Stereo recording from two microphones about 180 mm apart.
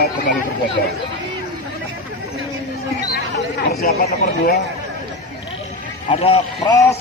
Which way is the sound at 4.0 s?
55° left (ahead or behind).